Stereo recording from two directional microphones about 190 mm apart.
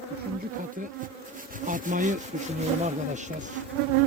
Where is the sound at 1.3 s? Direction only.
45° right (ahead or behind).